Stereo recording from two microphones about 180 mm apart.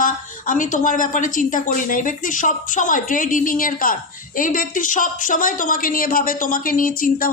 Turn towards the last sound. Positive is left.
turn(degrees=50)  # may be behind; listen again after turning